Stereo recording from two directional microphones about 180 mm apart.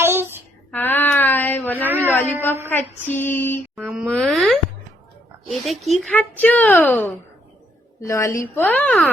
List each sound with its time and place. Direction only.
0.0 s child singing: 10° right (ahead or behind)
0.7 s a sound: 10° left (ahead or behind)
2.6 s a woman's voice: 10° left (ahead or behind)